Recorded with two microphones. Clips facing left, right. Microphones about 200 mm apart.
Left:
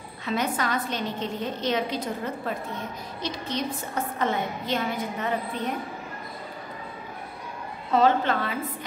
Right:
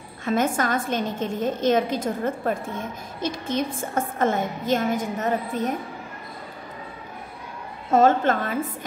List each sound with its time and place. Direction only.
0.2 s a woman's voice: 50° right (ahead or behind)
7.9 s a woman's voice: 45° right (ahead or behind)